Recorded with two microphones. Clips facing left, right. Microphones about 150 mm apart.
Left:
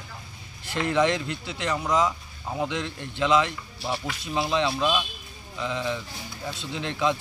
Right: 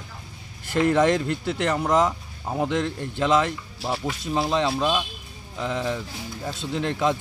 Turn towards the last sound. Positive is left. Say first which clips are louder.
# right 3 dB
turn(degrees=-40)  # may be behind; listen again after turning